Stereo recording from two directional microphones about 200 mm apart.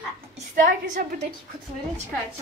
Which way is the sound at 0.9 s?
40° right (ahead or behind).